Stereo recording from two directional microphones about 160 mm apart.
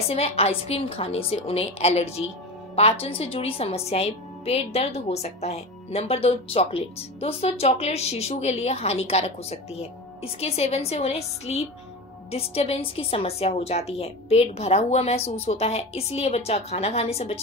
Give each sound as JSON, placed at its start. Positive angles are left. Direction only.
{"t": 0.1, "sound": "a woman's voice", "side_deg": 40}